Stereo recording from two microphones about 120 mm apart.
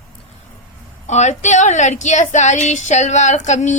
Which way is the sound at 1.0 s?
80° left.